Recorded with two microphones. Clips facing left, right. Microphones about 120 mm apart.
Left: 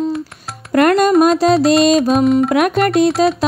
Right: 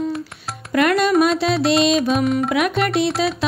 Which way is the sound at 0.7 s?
40° left (ahead or behind).